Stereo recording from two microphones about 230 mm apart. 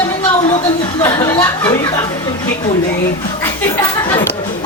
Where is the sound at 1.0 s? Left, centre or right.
Centre.